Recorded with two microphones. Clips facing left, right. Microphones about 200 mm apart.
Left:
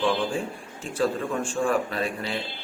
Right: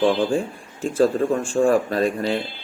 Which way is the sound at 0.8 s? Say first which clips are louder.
Right 8 dB; 45° right (ahead or behind).